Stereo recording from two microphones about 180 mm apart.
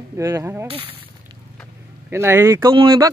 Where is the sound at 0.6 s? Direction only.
30° right (ahead or behind).